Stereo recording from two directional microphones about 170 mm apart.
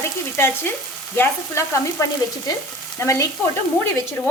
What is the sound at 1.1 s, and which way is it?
A woman's voice, 15° left (ahead or behind).